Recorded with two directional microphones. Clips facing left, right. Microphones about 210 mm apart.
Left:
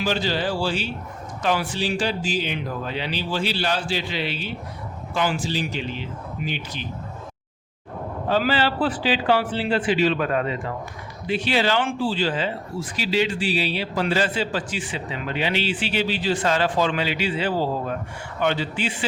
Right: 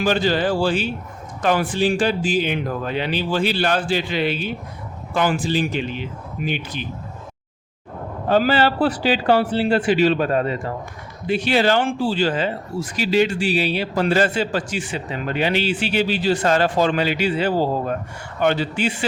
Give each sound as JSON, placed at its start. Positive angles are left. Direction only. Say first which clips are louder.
{"t": 0.0, "sound": "speech", "louder": "right 5 dB", "side_deg": -50}
{"t": 8.3, "sound": "speech", "louder": "right 4 dB", "side_deg": -45}
{"t": 10.2, "sound": "speech", "louder": "right 3 dB", "side_deg": -35}
{"t": 11.3, "sound": "speech", "louder": "right 4 dB", "side_deg": -50}